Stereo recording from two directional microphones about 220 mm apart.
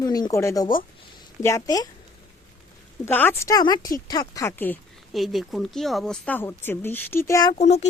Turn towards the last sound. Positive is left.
turn(degrees=30)  # may be behind; listen again after turning